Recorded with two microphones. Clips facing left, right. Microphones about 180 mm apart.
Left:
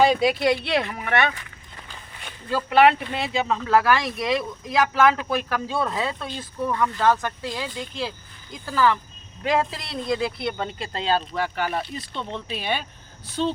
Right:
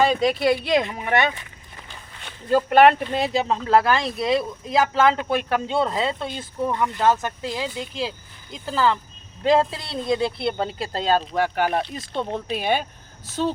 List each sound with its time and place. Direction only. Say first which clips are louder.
0.0 s speech: even; 10° left (ahead or behind)
0.7 s speech: right 3 dB; 20° right (ahead or behind)
2.5 s speech: right 3 dB; 45° right (ahead or behind)